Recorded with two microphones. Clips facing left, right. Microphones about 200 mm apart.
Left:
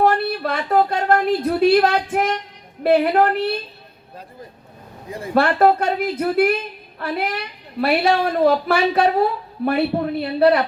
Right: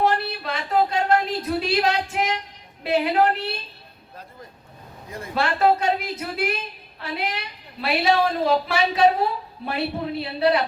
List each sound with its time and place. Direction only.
0.0 s speech: 55° left (ahead or behind)
5.3 s a woman's voice: 55° left (ahead or behind)